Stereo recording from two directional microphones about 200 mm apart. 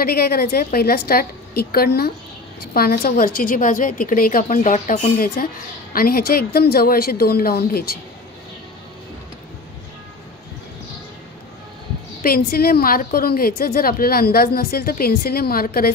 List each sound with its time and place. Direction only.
0.0 s a woman's voice: 50° left (ahead or behind)
12.2 s a woman's voice: 45° left (ahead or behind)